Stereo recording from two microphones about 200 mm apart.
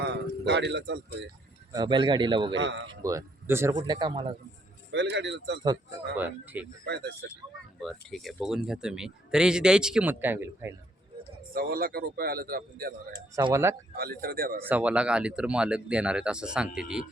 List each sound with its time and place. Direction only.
0.0 s speech: 55° right (ahead or behind)
1.7 s a man's voice: 20° right (ahead or behind)
2.6 s speech: 70° right (ahead or behind)
2.8 s a man's voice: 20° right (ahead or behind)
4.9 s speech: 60° right (ahead or behind)
6.1 s speech: 10° right (ahead or behind)
6.8 s speech: 55° right (ahead or behind)
7.8 s speech: centre (ahead or behind)
11.5 s a man's voice: 45° right (ahead or behind)
13.1 s speech: 20° right (ahead or behind)
13.9 s a man's voice: 50° right (ahead or behind)
14.7 s speech: 5° right (ahead or behind)